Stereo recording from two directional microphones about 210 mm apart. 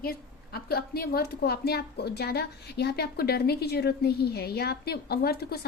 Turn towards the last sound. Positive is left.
turn(degrees=50)  # may be behind; listen again after turning